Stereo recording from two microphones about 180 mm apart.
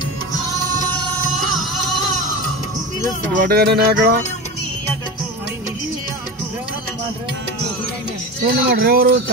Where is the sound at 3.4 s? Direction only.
60° right (ahead or behind).